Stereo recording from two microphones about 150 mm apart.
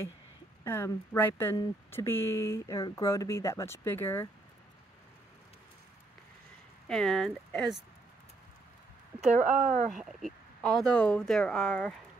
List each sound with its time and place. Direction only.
0.7 s speech: 15° left (ahead or behind)
6.9 s speech: 5° left (ahead or behind)
9.4 s speech: 55° right (ahead or behind)
10.2 s speech: centre (ahead or behind)